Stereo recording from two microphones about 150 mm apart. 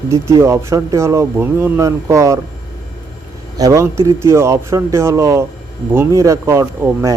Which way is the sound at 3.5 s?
20° right (ahead or behind).